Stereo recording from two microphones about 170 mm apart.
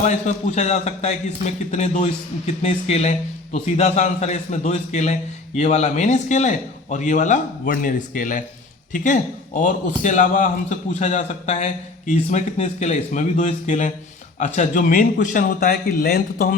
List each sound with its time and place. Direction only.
0.0 s a man's voice: 45° left (ahead or behind); by 16.6 s 60° left (ahead or behind)